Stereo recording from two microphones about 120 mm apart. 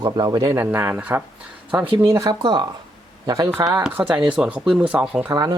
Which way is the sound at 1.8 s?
45° right (ahead or behind).